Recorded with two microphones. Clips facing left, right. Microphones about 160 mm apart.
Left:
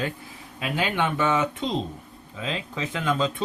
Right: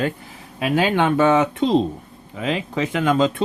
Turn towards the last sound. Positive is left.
turn(degrees=-80)